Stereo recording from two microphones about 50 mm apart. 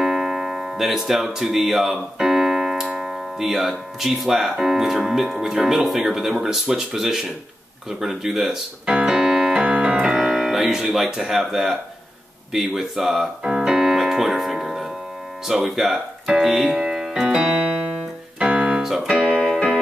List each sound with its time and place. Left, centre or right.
0.0 s music: centre
3.0 s speech: centre
8.9 s keyboard: centre
10.1 s music: centre
10.6 s speech: centre
13.4 s piano: centre
15.4 s speech: centre
18.4 s piano: right
19.4 s music: centre